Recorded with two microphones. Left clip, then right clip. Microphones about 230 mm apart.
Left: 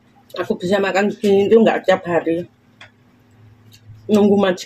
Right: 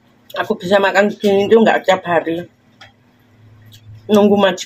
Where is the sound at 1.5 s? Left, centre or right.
Centre.